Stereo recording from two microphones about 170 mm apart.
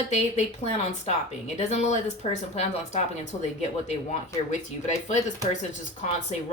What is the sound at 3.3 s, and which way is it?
Speech, 30° left (ahead or behind).